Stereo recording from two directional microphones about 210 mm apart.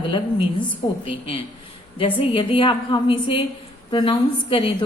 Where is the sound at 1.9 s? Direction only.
25° left (ahead or behind).